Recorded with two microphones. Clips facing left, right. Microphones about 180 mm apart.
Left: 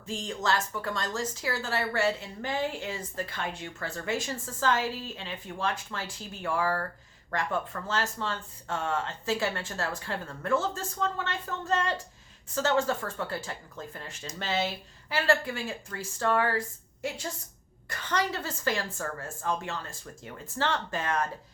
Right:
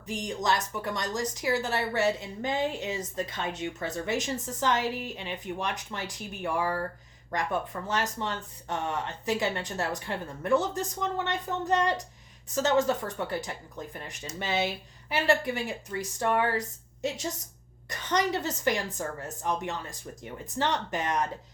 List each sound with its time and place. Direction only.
0.0 s speech: 15° right (ahead or behind)